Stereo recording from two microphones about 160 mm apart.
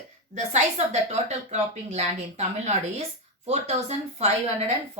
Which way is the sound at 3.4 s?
45° right (ahead or behind).